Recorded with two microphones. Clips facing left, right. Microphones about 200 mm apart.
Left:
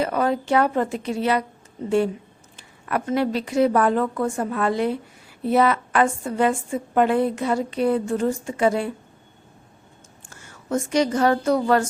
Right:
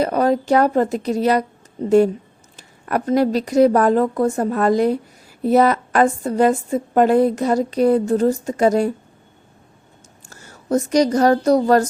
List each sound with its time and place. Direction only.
0.0 s a woman's voice: 40° right (ahead or behind)
10.2 s speech: 40° right (ahead or behind)